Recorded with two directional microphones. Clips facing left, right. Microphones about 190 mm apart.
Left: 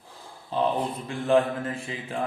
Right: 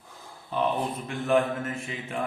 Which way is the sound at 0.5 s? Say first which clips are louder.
Left 1 dB; 30° left (ahead or behind).